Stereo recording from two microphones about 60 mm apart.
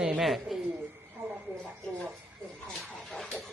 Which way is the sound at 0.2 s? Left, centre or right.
Centre.